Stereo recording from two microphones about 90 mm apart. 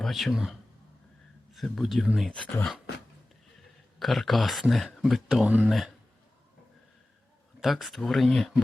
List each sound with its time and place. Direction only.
0.0 s speech: centre (ahead or behind)
1.5 s speech: centre (ahead or behind)
4.0 s speech: centre (ahead or behind)
5.5 s speech: 15° right (ahead or behind)
7.6 s speech: centre (ahead or behind)